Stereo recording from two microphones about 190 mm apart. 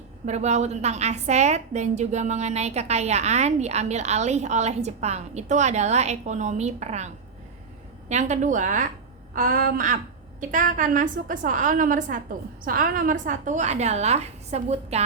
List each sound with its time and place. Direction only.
0.3 s a woman's voice: 35° right (ahead or behind)
8.1 s a woman's voice: 35° right (ahead or behind)